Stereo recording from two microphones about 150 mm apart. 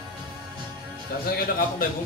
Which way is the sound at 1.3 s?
70° left (ahead or behind).